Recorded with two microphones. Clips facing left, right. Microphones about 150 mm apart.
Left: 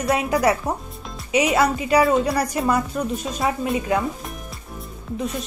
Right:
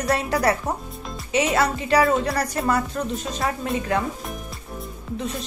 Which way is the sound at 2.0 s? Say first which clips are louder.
Left 2 dB; centre (ahead or behind).